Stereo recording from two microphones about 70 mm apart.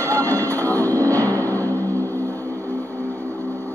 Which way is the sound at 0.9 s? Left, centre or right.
Right.